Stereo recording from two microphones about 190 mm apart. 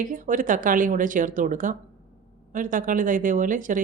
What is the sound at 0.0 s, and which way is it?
Speech, 45° right (ahead or behind).